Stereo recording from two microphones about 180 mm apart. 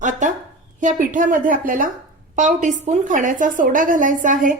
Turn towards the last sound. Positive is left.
turn(degrees=-45)  # may be behind; listen again after turning